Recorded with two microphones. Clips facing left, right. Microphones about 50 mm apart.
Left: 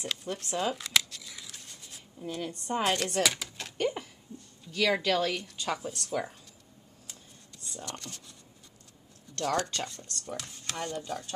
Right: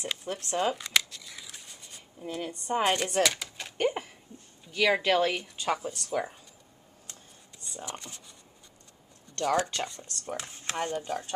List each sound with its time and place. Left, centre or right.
0.0 s speech: centre
0.7 s scissors: centre
2.2 s speech: centre
3.2 s a sound: centre
3.7 s a sound: right
4.6 s speech: right
5.8 s speech: centre
7.6 s speech: centre
9.4 s speech: centre
10.2 s speech: right